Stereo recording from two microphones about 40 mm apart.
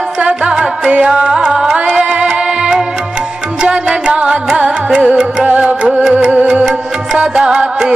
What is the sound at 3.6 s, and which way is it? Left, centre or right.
Music, right.